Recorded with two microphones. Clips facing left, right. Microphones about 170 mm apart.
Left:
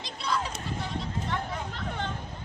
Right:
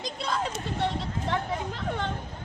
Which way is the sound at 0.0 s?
50° right (ahead or behind).